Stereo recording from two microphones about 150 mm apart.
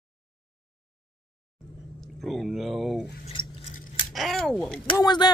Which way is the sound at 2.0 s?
Centre (ahead or behind).